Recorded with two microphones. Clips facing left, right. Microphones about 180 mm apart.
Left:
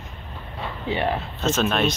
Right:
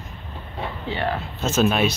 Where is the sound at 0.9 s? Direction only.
15° left (ahead or behind).